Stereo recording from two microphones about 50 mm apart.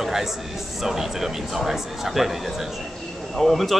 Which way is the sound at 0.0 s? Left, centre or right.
Centre.